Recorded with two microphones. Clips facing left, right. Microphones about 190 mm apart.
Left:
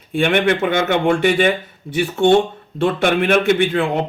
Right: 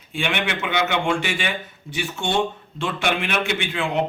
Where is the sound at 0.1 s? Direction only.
50° left (ahead or behind).